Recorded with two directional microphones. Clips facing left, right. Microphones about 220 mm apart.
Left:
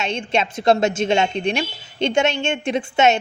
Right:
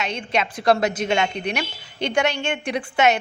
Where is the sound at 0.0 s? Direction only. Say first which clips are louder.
Left 3 dB; 25° left (ahead or behind).